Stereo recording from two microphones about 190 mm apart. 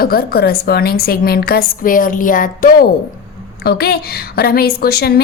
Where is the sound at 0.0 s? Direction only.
55° left (ahead or behind).